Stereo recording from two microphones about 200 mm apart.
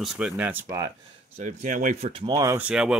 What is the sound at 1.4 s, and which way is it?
Speech, 40° right (ahead or behind).